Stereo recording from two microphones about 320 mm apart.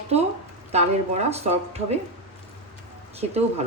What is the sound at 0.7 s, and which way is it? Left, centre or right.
Speech, centre.